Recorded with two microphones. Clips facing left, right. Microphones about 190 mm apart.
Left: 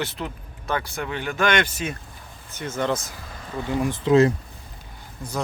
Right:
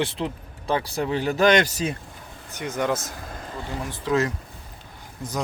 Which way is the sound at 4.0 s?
25° left (ahead or behind).